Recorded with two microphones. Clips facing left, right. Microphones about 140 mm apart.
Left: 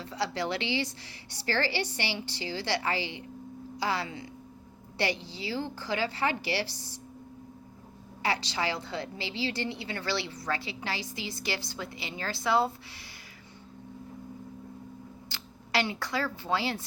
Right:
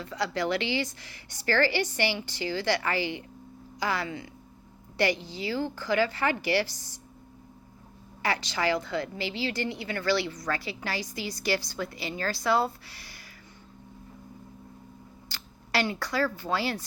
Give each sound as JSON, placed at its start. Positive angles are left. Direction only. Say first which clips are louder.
{"t": 0.1, "sound": "a woman's voice", "louder": "right 3 dB", "side_deg": 30}
{"t": 6.4, "sound": "a woman's voice", "louder": "right 5 dB", "side_deg": -55}
{"t": 8.2, "sound": "a woman's voice", "louder": "right 2 dB", "side_deg": 25}
{"t": 15.3, "sound": "speech", "louder": "right 1 dB", "side_deg": 20}